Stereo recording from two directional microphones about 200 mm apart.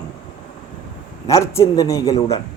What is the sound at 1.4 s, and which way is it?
Speech, 15° left (ahead or behind).